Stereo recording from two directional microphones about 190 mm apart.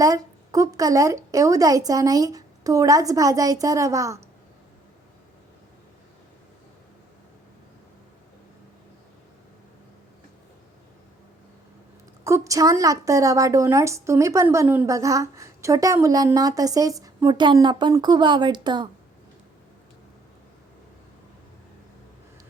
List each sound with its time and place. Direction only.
0.0 s a woman's voice: 20° right (ahead or behind)
12.2 s a woman's voice: 15° right (ahead or behind)